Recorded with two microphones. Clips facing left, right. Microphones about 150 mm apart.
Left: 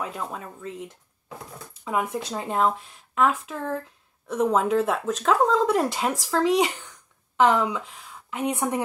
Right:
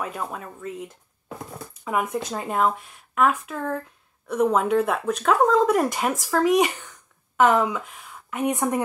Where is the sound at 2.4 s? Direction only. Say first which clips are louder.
Even; 30° left (ahead or behind).